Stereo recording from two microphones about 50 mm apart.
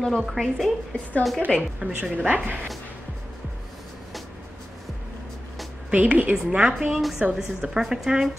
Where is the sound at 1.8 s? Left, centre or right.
Centre.